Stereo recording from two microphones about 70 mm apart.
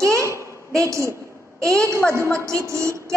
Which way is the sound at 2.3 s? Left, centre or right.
Right.